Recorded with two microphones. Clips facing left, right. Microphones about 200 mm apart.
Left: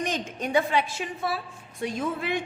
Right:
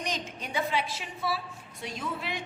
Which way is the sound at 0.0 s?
50° left (ahead or behind).